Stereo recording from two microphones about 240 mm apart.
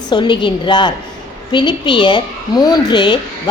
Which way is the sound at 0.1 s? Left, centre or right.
Centre.